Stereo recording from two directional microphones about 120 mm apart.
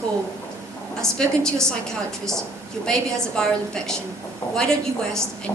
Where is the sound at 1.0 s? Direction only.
5° left (ahead or behind).